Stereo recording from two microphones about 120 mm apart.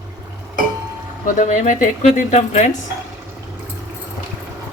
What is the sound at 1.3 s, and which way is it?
Speech, 90° left.